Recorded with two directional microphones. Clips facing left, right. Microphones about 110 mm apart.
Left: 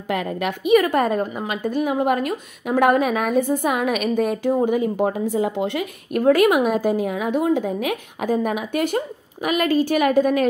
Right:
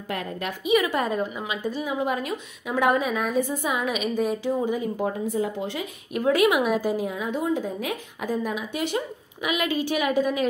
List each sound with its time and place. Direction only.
0.1 s a woman's voice: 85° left
0.7 s a woman's voice: 50° left (ahead or behind)
4.6 s a woman's voice: 70° left (ahead or behind); by 10.4 s 50° left (ahead or behind)